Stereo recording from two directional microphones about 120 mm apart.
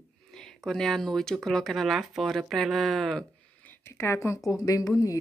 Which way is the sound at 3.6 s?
20° left (ahead or behind).